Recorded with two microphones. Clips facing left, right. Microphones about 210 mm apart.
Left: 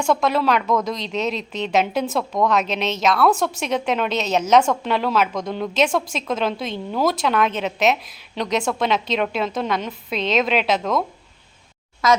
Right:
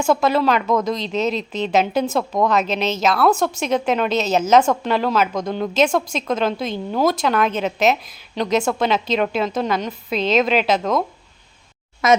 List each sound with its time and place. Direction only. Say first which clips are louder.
0.0 s a woman's voice: right 2 dB; 5° right (ahead or behind)
12.0 s a child's voice: right 3 dB; 20° right (ahead or behind)